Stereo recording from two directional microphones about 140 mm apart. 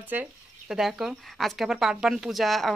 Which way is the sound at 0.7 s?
Centre (ahead or behind).